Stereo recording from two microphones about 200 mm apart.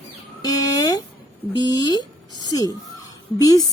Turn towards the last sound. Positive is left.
turn(degrees=20)  # may be behind; listen again after turning